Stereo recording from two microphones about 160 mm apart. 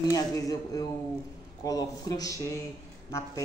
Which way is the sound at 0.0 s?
20° left (ahead or behind).